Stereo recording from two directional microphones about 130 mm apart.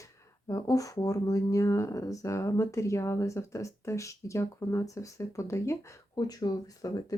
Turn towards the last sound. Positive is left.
turn(degrees=30)  # may be behind; listen again after turning